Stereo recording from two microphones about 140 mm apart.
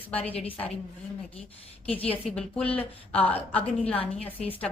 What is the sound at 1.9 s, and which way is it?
Speech, 40° left (ahead or behind).